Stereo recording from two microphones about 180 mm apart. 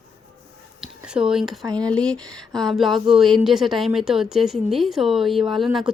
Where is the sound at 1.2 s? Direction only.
5° right (ahead or behind).